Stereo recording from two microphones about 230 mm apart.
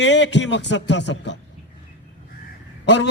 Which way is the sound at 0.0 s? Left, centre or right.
Left.